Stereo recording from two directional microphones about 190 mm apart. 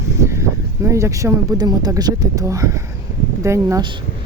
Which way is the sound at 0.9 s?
15° right (ahead or behind).